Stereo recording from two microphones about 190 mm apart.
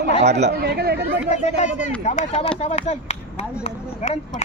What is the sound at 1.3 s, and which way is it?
Speech, 40° left (ahead or behind).